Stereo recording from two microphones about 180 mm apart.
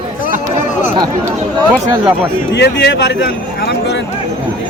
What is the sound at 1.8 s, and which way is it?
Speech, 20° right (ahead or behind).